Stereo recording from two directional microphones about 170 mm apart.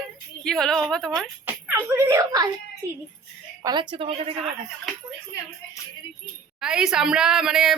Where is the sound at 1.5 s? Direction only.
10° right (ahead or behind).